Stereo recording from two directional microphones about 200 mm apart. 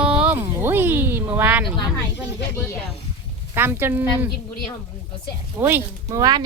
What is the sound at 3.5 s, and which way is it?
Speech, 10° right (ahead or behind).